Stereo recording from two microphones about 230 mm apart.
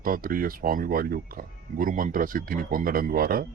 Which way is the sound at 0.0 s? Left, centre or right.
Right.